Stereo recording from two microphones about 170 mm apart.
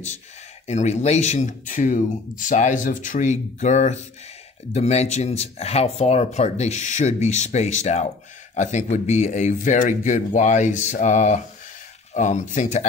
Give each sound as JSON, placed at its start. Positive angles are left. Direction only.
{"t": 0.7, "sound": "speech", "side_deg": 40}